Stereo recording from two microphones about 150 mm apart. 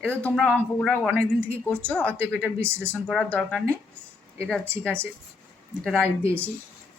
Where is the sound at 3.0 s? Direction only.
5° left (ahead or behind).